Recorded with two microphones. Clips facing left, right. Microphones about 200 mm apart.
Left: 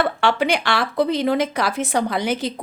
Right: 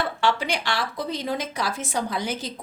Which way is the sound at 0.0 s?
60° left (ahead or behind).